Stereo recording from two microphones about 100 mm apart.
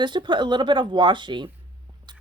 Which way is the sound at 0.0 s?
50° right (ahead or behind).